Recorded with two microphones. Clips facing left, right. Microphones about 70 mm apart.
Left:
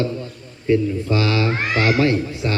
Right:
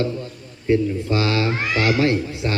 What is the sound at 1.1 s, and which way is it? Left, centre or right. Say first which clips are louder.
Speech: left 1 dB; right.